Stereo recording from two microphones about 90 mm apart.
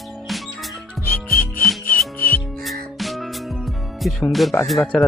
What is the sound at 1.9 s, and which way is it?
Music, 20° left (ahead or behind).